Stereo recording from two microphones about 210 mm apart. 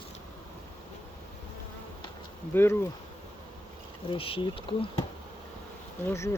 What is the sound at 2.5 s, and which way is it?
Speech, 10° left (ahead or behind).